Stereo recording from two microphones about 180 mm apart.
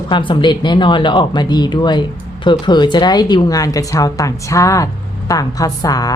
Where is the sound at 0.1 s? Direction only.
25° left (ahead or behind).